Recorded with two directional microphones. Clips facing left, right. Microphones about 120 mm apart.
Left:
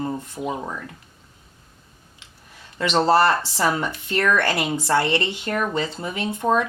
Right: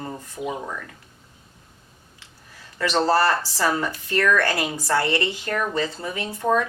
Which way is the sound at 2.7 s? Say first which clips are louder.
Left 2 dB; 20° left (ahead or behind).